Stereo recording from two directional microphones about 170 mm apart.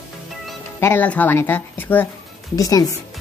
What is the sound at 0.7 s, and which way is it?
Speech, 15° left (ahead or behind).